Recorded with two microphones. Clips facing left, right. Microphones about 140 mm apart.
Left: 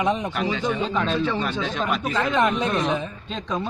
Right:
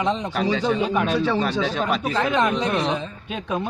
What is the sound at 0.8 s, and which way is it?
Speech, 15° right (ahead or behind).